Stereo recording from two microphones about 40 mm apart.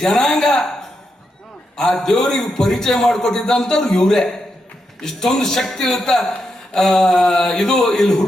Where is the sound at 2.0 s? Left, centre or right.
Centre.